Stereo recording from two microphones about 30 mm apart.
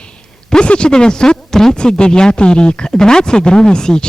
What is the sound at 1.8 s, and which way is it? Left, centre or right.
Speech, left.